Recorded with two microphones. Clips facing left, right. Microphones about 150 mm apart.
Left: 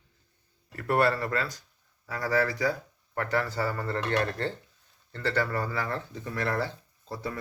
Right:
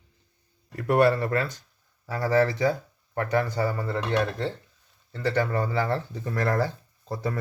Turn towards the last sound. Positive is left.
turn(degrees=-45)  # may be behind; listen again after turning